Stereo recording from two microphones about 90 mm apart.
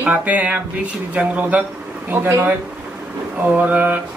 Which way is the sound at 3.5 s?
15° right (ahead or behind).